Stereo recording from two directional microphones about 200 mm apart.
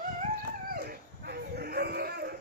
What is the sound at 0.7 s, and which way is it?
Dog, 50° right (ahead or behind).